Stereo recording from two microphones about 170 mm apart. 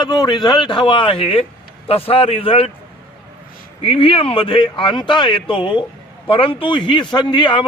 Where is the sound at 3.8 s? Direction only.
35° left (ahead or behind).